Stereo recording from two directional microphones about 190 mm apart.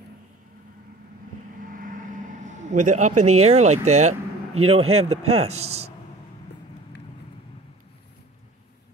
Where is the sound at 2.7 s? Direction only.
40° right (ahead or behind).